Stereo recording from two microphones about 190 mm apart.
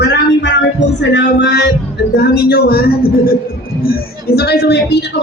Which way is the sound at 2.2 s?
55° left (ahead or behind).